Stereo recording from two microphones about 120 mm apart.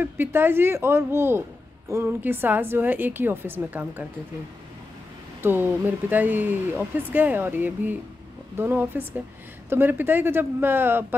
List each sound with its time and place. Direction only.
0.0 s speech: 15° right (ahead or behind)
5.4 s speech: 15° right (ahead or behind)